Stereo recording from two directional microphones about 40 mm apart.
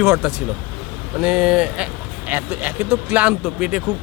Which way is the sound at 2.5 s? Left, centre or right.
Right.